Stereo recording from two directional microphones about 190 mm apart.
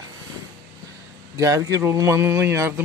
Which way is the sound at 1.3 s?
15° right (ahead or behind).